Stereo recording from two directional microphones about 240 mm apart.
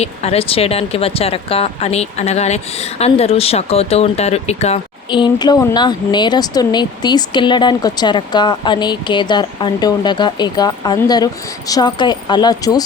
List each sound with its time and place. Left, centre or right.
0.0 s speech: left